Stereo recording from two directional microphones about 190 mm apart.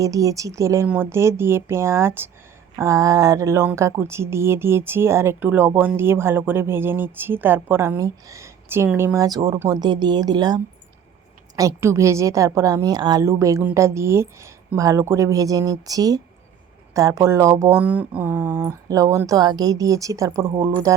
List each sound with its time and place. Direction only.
0.0 s speech: 15° right (ahead or behind)